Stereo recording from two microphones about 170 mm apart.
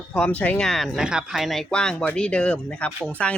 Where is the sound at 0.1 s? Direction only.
10° left (ahead or behind).